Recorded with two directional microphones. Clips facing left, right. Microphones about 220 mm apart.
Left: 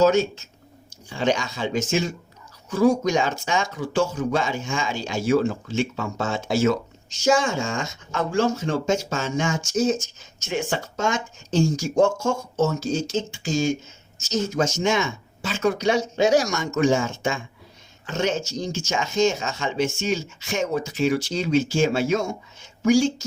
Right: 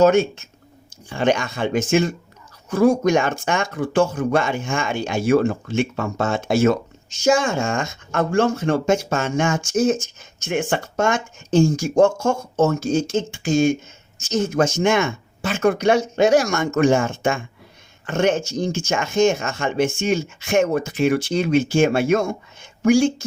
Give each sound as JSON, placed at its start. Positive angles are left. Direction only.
{"t": 0.0, "sound": "speech", "side_deg": -55}